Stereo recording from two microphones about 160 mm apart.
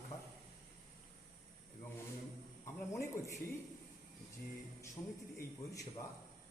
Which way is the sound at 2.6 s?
20° left (ahead or behind).